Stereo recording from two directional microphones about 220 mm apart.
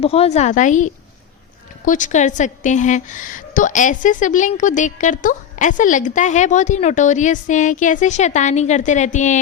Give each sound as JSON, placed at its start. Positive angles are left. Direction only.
{"t": 0.0, "sound": "a woman's voice", "side_deg": 25}